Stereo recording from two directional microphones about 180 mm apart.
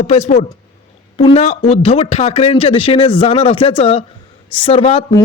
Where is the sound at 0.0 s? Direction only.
35° left (ahead or behind).